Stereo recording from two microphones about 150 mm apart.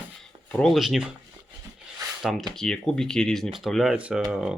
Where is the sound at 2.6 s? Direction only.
5° left (ahead or behind).